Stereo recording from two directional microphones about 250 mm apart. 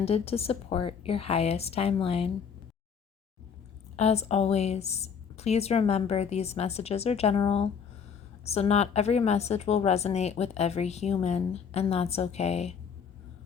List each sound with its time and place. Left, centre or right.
0.0 s a woman's voice: left
3.9 s a woman's voice: left